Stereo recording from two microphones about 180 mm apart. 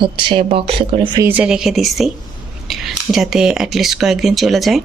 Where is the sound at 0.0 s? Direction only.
25° right (ahead or behind).